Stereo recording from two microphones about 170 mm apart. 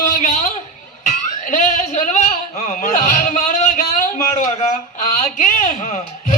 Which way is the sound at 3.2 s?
50° left (ahead or behind).